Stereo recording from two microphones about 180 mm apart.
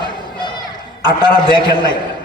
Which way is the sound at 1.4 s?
20° right (ahead or behind).